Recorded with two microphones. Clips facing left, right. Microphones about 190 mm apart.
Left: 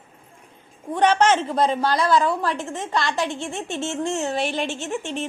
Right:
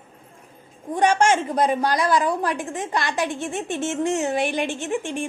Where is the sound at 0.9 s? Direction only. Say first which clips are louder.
Left 1 dB; 10° right (ahead or behind).